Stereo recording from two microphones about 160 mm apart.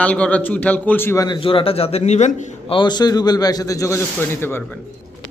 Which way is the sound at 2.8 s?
25° left (ahead or behind).